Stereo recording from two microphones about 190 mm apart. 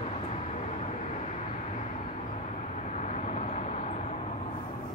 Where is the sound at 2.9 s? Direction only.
40° left (ahead or behind).